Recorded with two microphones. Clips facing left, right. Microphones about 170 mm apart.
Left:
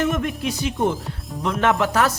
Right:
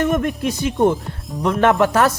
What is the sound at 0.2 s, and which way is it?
Speech, 50° right (ahead or behind).